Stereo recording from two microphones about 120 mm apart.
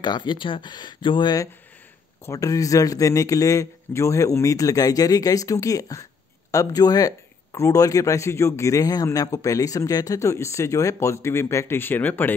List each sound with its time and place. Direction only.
0.0 s speech: 40° left (ahead or behind)
2.2 s speech: 30° left (ahead or behind)